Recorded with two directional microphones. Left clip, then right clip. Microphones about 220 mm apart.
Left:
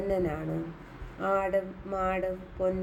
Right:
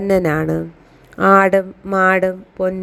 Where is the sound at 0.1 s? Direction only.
45° right (ahead or behind).